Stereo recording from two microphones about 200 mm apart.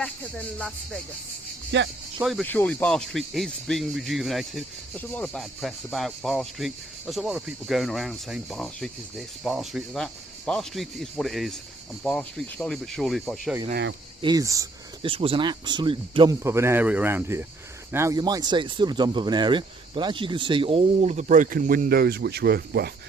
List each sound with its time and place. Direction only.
0.0 s speech: 5° left (ahead or behind)
1.7 s speech: 60° right (ahead or behind)
2.2 s speech: 5° left (ahead or behind)
14.2 s speech: 20° right (ahead or behind)
15.1 s speech: 25° right (ahead or behind)
16.4 s speech: 15° right (ahead or behind); by 22.9 s 50° right (ahead or behind)